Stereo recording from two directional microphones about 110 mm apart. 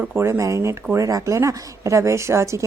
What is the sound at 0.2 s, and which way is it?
Speech, 25° right (ahead or behind).